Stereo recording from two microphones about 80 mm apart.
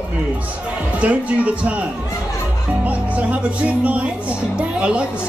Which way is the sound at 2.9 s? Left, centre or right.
Centre.